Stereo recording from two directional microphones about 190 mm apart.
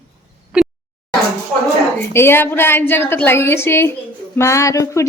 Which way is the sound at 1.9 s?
15° left (ahead or behind).